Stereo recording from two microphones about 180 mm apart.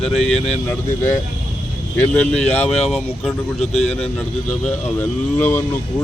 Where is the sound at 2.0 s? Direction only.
5° left (ahead or behind).